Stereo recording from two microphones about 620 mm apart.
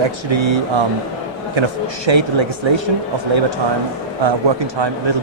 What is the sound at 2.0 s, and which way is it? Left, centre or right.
Speech, right.